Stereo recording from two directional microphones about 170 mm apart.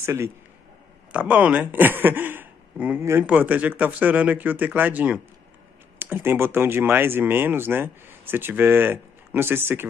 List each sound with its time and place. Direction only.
0.0 s a man's voice: 15° right (ahead or behind)